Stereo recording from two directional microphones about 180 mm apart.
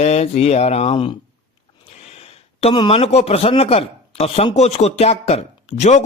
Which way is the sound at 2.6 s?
30° left (ahead or behind).